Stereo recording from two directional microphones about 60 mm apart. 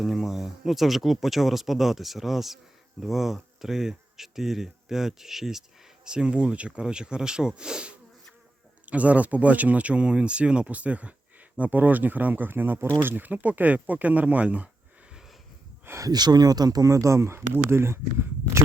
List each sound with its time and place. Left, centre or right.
0.0 s speech: centre; by 14.7 s right
16.0 s speech: right